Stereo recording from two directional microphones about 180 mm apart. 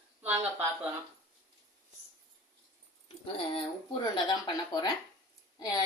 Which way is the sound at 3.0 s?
30° left (ahead or behind).